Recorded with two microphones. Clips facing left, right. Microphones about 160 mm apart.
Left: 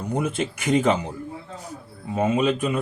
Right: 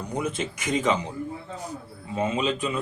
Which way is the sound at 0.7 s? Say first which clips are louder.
Left 4 dB; 55° left (ahead or behind).